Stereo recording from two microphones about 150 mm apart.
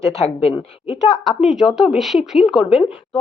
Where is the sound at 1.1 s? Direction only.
Centre (ahead or behind).